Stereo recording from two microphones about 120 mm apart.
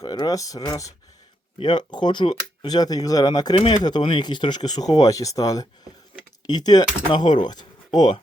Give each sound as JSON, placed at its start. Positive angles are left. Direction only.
{"t": 0.0, "sound": "speech", "side_deg": 35}